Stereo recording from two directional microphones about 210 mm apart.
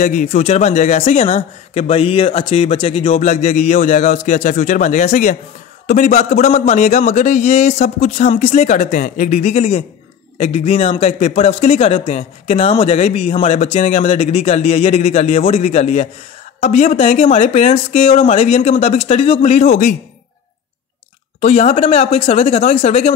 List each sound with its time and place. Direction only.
0.0 s a man's voice: 35° left (ahead or behind)
21.4 s a man's voice: 30° left (ahead or behind)